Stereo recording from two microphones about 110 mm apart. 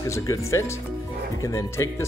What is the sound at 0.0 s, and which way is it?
Speech, 30° left (ahead or behind).